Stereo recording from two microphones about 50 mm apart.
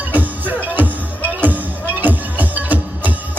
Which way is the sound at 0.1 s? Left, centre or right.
Right.